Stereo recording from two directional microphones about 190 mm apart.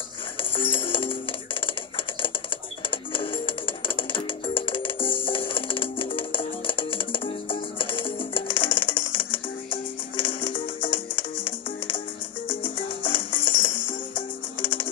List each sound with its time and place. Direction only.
0.4 s music: 30° left (ahead or behind)
2.9 s music: 30° left (ahead or behind)